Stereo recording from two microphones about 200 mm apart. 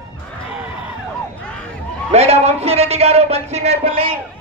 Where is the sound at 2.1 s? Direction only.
30° right (ahead or behind).